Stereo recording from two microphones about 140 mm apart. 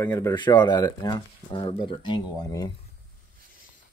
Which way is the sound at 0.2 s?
30° left (ahead or behind).